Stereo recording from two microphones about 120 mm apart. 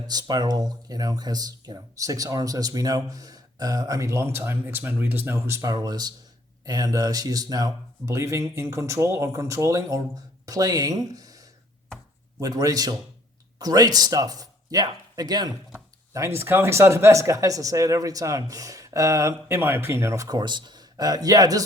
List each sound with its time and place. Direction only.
0.1 s speech: 35° right (ahead or behind)
16.1 s speech: 20° right (ahead or behind)